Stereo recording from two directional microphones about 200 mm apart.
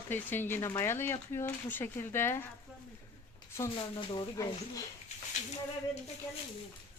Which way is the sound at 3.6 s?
25° left (ahead or behind).